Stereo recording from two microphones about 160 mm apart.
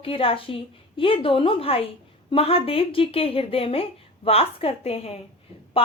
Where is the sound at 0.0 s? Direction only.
35° left (ahead or behind).